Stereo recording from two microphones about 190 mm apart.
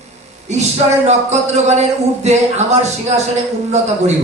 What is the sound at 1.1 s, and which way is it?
A man's voice, 35° right (ahead or behind).